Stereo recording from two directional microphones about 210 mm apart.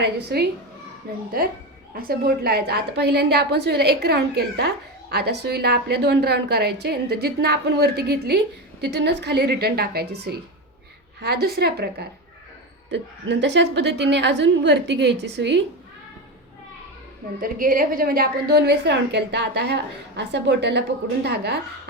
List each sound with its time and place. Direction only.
0.0 s a woman's voice: 50° right (ahead or behind)
1.9 s a woman's voice: 45° right (ahead or behind)
17.4 s a woman's voice: 40° right (ahead or behind)